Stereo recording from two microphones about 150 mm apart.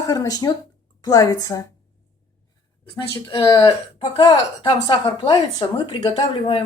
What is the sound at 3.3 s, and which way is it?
Speech, 35° left (ahead or behind).